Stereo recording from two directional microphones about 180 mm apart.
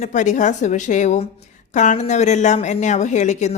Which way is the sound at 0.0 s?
45° left (ahead or behind).